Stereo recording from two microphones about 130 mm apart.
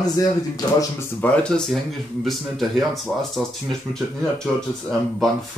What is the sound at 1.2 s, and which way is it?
Speech, 5° left (ahead or behind).